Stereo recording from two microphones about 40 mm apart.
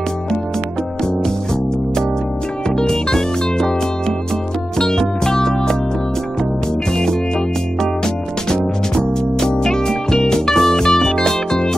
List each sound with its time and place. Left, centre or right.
2.7 s music: centre
4.7 s music: centre
7.8 s music: centre